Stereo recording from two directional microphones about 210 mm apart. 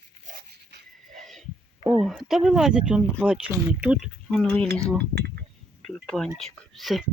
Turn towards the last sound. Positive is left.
turn(degrees=0)  # may be behind; listen again after turning